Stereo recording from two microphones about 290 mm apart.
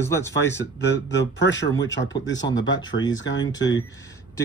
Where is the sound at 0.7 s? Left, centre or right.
Left.